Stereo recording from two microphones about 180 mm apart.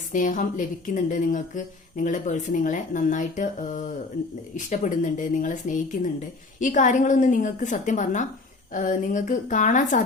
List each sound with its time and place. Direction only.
0.1 s speech: 45° left (ahead or behind)